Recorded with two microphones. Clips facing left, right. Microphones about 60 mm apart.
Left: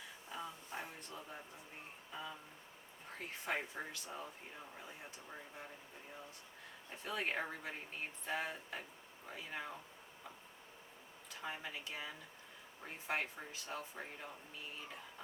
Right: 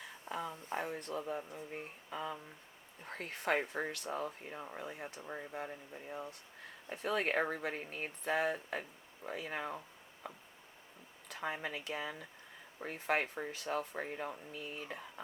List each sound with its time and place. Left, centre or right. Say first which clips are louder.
0.3 s speech: right 7 dB; right
6.9 s speech: right 6 dB; right
7.7 s speech: right 5 dB; right
8.2 s speech: right 8 dB; right
9.2 s speech: right 8 dB; right
9.5 s speech: right 3 dB; right
11.3 s speech: right 6 dB; right